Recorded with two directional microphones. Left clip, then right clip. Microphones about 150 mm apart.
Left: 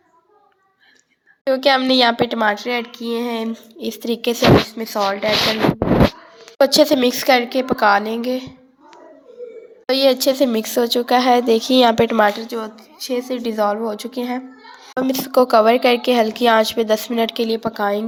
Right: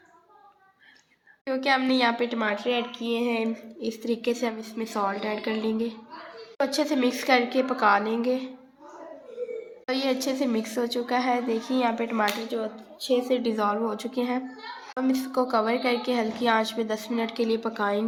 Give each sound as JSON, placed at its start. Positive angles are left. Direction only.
{"t": 1.5, "sound": "speech", "side_deg": 50}
{"t": 4.8, "sound": "a woman's voice", "side_deg": 40}
{"t": 6.6, "sound": "a woman's voice", "side_deg": 45}
{"t": 9.8, "sound": "speech", "side_deg": 45}
{"t": 13.2, "sound": "a woman's voice", "side_deg": 50}
{"t": 14.9, "sound": "speech", "side_deg": 60}